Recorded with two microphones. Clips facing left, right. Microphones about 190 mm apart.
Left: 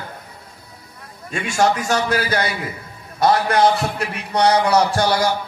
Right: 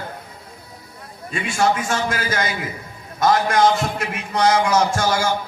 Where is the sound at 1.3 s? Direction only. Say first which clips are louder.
Left 1 dB; 45° left (ahead or behind).